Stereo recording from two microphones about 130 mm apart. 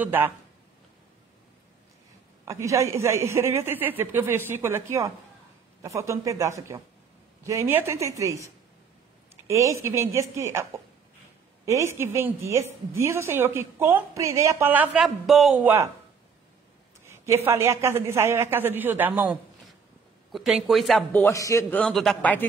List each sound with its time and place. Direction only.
0.0 s speech: 15° right (ahead or behind)
2.4 s a woman's voice: 25° right (ahead or behind)
9.5 s a woman's voice: 25° right (ahead or behind)
15.0 s speech: centre (ahead or behind)
15.6 s speech: 15° right (ahead or behind)
17.0 s a woman's voice: 20° right (ahead or behind)
20.2 s speech: centre (ahead or behind)
21.1 s a man's voice: 15° left (ahead or behind)
21.7 s speech: 5° left (ahead or behind)